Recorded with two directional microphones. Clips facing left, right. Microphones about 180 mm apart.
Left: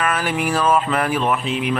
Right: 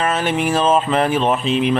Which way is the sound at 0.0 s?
25° right (ahead or behind).